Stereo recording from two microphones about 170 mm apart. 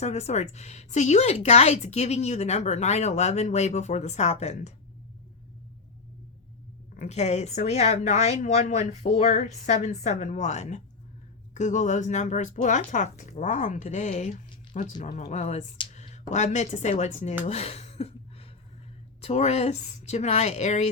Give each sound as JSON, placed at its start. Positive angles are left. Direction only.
{"t": 0.0, "sound": "a woman's voice", "side_deg": 40}
{"t": 6.9, "sound": "a woman's voice", "side_deg": 45}
{"t": 17.4, "sound": "a sound", "side_deg": 35}
{"t": 19.2, "sound": "a woman's voice", "side_deg": 40}